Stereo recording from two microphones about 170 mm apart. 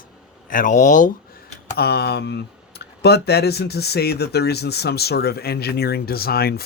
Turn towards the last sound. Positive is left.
turn(degrees=65)  # may be behind; listen again after turning